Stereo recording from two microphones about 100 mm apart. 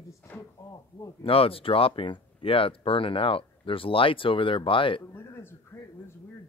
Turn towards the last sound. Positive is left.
turn(degrees=25)  # may be behind; listen again after turning